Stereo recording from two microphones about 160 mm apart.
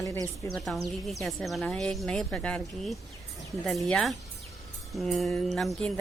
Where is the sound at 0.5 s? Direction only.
Centre (ahead or behind).